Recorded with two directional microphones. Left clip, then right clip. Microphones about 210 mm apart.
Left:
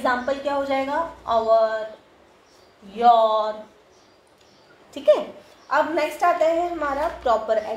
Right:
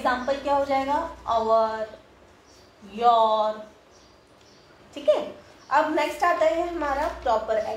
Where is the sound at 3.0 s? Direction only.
30° left (ahead or behind).